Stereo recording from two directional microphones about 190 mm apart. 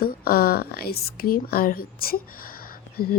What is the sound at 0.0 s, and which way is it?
Speech, 50° left (ahead or behind).